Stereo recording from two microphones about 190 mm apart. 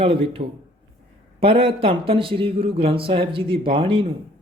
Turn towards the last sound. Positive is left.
turn(degrees=-25)  # may be behind; listen again after turning